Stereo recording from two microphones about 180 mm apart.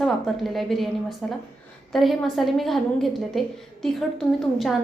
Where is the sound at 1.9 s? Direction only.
Centre (ahead or behind).